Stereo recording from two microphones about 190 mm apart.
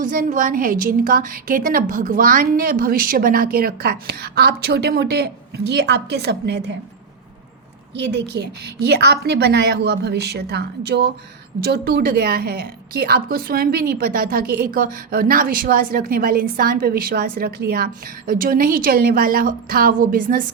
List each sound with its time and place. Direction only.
0.0 s a woman's voice: 45° right (ahead or behind); by 6.7 s 60° right (ahead or behind)
7.9 s a woman's voice: 65° right (ahead or behind); by 20.4 s 50° right (ahead or behind)